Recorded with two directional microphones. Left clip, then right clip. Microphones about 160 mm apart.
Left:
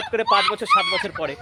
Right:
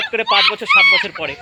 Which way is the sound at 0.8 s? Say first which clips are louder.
Right 10 dB; 35° left (ahead or behind).